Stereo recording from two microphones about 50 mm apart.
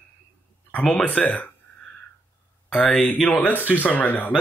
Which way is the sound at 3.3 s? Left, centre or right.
Left.